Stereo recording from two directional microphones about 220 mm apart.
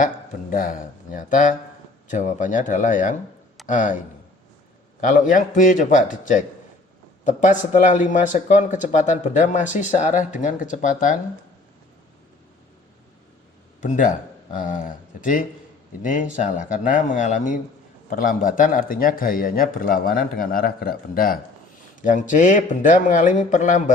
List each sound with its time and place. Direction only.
0.5 s a man's voice: 40° left (ahead or behind)
4.9 s a man's voice: 35° left (ahead or behind)
13.8 s a man's voice: 35° left (ahead or behind)